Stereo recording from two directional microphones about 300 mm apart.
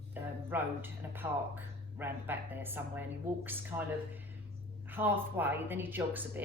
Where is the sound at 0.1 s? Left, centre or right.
Centre.